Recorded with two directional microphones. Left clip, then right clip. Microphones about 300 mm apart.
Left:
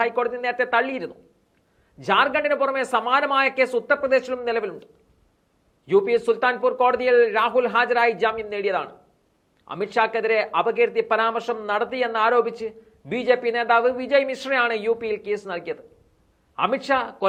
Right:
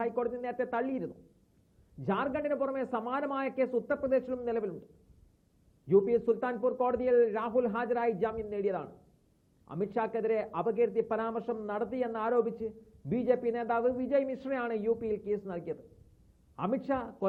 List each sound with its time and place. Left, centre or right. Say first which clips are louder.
0.0 s speech: left 10 dB; centre
5.9 s speech: left 7 dB; centre